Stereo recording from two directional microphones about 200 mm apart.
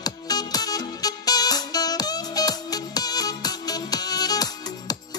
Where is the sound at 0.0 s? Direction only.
20° left (ahead or behind).